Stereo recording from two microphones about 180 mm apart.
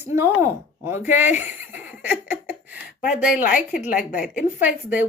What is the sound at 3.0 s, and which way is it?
Speech, 45° left (ahead or behind).